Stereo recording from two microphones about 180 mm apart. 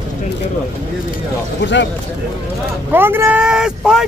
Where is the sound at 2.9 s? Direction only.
10° right (ahead or behind).